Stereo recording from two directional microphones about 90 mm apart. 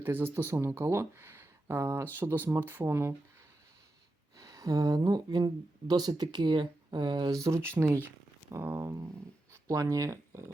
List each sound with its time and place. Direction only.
0.0 s speech: 25° right (ahead or behind)
4.4 s speech: 40° right (ahead or behind)
7.4 s speech: 30° right (ahead or behind)
8.4 s a sound: 30° right (ahead or behind)
9.5 s speech: 35° right (ahead or behind)